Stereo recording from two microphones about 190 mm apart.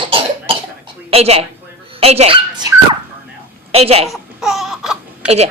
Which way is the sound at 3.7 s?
30° right (ahead or behind).